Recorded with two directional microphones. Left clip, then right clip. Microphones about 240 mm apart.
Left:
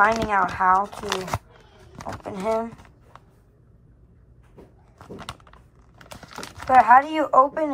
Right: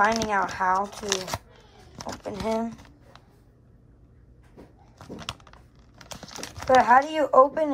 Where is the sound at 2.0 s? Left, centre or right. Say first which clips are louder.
Left 2 dB; centre.